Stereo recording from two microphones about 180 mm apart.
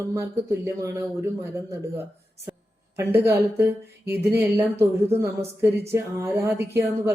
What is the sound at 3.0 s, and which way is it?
Speech, 15° right (ahead or behind).